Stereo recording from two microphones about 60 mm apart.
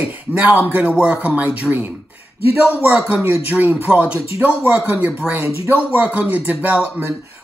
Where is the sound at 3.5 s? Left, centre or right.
Right.